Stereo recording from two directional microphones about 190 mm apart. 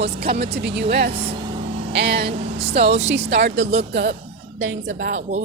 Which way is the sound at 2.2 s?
30° right (ahead or behind).